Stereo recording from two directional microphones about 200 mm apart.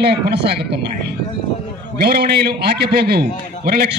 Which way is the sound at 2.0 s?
50° right (ahead or behind).